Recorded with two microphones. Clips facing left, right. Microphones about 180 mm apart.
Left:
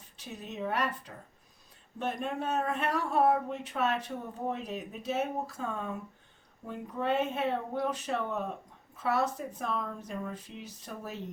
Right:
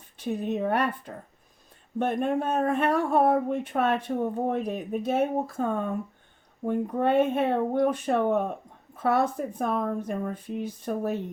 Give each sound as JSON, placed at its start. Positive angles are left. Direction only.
{"t": 0.2, "sound": "speech", "side_deg": -55}